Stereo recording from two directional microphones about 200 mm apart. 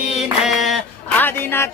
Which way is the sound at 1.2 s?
10° left (ahead or behind).